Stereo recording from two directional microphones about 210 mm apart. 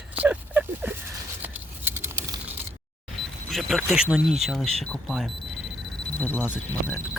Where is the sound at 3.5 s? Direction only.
Centre (ahead or behind).